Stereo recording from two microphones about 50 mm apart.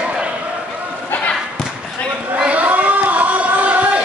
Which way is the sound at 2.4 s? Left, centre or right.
Right.